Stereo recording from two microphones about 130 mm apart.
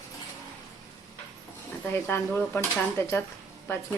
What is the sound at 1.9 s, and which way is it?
A woman's voice, 15° left (ahead or behind).